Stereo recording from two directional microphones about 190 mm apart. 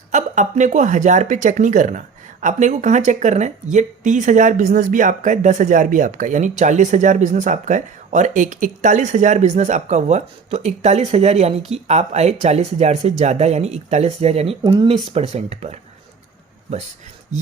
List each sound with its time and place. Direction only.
0.1 s speech: 40° right (ahead or behind)